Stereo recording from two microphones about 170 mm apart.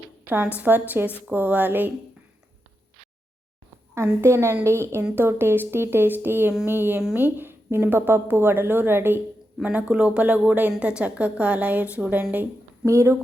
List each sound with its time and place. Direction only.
0.3 s a woman's voice: 10° right (ahead or behind)
3.9 s a woman's voice: 15° right (ahead or behind)